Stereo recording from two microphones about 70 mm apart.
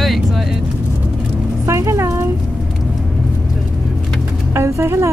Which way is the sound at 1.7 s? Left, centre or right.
Right.